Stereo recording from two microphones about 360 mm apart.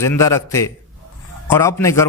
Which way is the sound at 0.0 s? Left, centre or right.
Centre.